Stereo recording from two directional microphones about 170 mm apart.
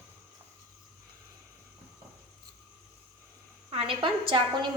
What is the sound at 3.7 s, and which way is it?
Speech, 30° right (ahead or behind).